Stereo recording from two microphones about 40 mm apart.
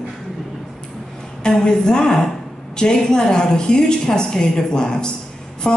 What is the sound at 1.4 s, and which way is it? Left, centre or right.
Speech, left.